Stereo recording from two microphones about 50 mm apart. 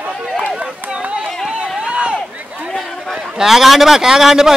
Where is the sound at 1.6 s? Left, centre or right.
Centre.